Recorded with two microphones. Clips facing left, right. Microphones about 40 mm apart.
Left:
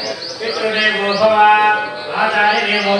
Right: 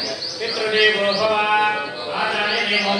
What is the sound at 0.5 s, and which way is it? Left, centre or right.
Mantra, centre.